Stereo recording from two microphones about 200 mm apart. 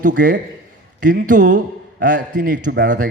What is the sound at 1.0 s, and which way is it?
A man's voice, 40° right (ahead or behind).